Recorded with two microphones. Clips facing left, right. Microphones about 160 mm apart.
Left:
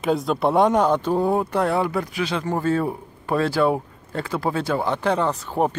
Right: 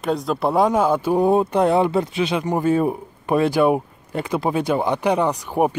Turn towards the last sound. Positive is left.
turn(degrees=-15)  # may be behind; listen again after turning